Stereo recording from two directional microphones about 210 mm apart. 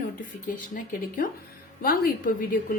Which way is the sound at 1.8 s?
40° left (ahead or behind).